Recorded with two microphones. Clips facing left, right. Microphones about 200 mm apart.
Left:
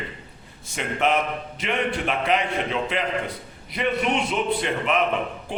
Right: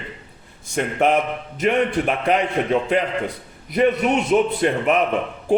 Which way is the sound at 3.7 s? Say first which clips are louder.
Right 6 dB; 45° right (ahead or behind).